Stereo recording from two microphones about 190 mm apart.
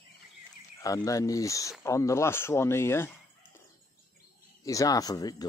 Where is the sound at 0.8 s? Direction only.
20° left (ahead or behind).